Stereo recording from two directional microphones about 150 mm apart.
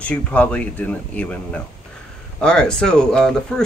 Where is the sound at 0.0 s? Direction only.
10° left (ahead or behind).